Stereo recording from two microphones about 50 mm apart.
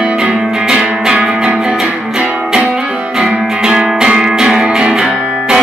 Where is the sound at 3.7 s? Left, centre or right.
Centre.